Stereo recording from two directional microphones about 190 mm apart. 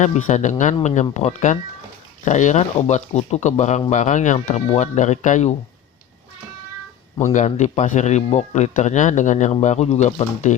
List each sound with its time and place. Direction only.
0.0 s speech: 40° left (ahead or behind)
7.3 s speech: 40° left (ahead or behind)